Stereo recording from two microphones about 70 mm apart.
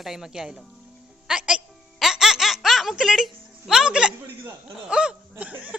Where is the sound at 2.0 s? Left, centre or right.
Centre.